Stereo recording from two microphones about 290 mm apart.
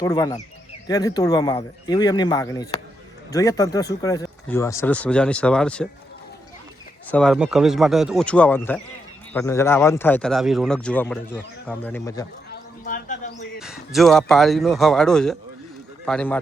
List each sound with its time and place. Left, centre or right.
0.0 s a man's voice: centre
7.1 s a man's voice: centre
12.8 s a man's voice: left
13.6 s a man's voice: centre